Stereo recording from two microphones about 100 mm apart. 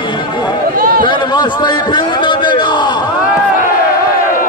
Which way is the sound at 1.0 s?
55° left (ahead or behind).